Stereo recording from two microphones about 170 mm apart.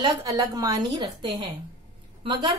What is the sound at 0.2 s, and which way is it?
Speech, 20° right (ahead or behind).